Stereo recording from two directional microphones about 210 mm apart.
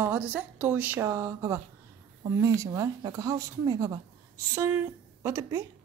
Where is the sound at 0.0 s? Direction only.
10° right (ahead or behind).